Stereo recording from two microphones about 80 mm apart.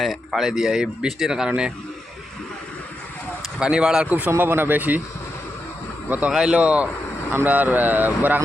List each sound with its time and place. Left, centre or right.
0.0 s speech: centre
3.6 s speech: centre
4.3 s speech: right
6.1 s speech: centre